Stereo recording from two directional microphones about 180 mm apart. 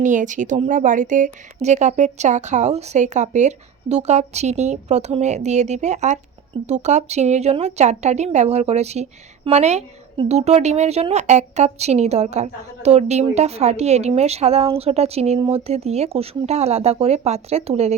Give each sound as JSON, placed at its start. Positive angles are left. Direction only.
{"t": 0.0, "sound": "a woman's voice", "side_deg": -45}